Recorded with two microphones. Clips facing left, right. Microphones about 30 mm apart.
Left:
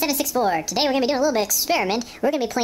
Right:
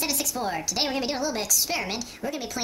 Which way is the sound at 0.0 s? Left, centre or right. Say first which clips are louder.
Left 7 dB; centre.